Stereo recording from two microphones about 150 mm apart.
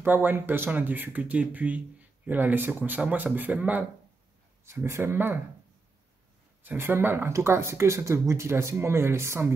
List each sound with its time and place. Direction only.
0.0 s speech: 15° right (ahead or behind)
6.6 s speech: 15° right (ahead or behind)